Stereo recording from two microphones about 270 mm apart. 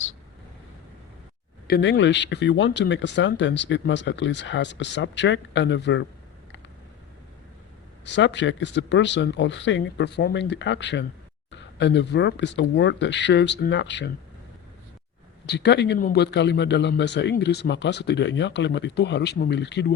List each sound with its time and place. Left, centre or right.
1.6 s speech: left
8.0 s speech: left
15.4 s speech: left